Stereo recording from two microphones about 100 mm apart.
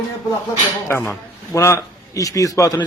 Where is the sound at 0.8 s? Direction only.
20° left (ahead or behind).